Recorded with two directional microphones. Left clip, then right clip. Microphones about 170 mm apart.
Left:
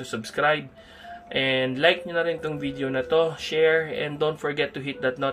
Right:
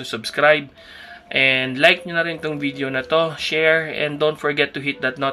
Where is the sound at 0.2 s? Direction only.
25° right (ahead or behind).